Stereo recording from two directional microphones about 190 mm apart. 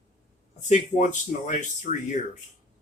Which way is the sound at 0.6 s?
40° left (ahead or behind).